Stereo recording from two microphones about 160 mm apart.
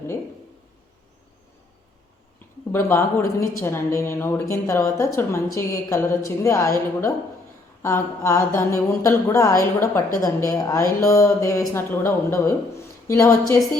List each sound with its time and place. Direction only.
2.7 s a woman's voice: 15° left (ahead or behind)